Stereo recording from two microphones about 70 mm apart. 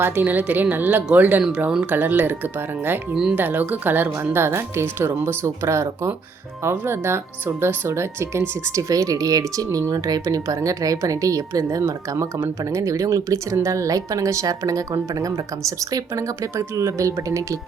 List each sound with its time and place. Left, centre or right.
0.0 s a woman's voice: right